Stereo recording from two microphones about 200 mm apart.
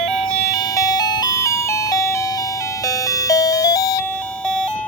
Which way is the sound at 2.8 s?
15° left (ahead or behind).